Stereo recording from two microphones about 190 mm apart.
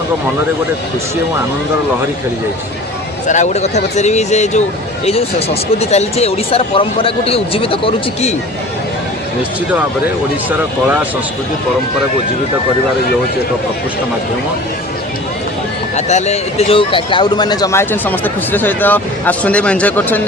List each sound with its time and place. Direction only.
3.2 s speech: 40° left (ahead or behind)
5.8 s speech: 35° left (ahead or behind)
16.0 s a man's voice: 35° left (ahead or behind); by 20.2 s 10° left (ahead or behind)